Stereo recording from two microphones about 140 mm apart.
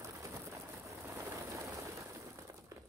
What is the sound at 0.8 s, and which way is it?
Vehicle, 20° right (ahead or behind).